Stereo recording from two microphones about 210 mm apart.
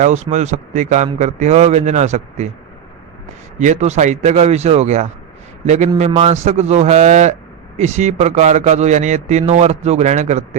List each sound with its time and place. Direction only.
0.0 s a man's voice: 35° right (ahead or behind)
3.6 s a man's voice: 35° right (ahead or behind)